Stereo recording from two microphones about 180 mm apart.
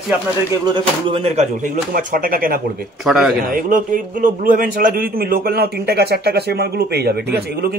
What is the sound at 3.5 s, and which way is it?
A man's voice, 50° right (ahead or behind).